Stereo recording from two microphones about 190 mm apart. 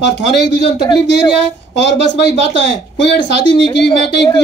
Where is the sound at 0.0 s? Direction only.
65° left (ahead or behind).